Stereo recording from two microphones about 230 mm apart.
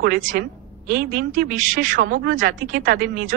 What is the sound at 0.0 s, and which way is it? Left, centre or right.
A woman's voice, right.